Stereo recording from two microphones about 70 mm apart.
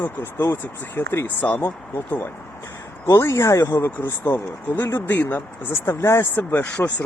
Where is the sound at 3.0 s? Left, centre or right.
Left.